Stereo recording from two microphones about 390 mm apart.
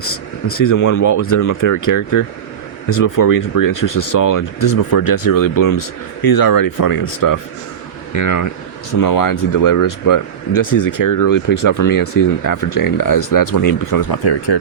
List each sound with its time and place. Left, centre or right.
0.6 s speech: left